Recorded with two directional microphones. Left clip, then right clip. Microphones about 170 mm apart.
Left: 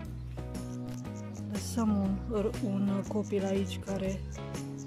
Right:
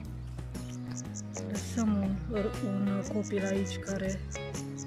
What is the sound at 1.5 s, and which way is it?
Speech, 5° left (ahead or behind).